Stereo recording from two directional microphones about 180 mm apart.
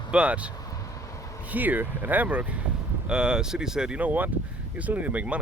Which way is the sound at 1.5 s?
10° right (ahead or behind).